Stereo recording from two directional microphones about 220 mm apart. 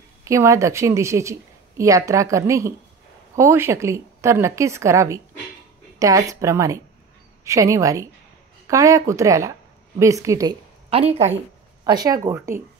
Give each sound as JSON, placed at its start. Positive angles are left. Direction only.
{"t": 0.2, "sound": "a woman's voice", "side_deg": -15}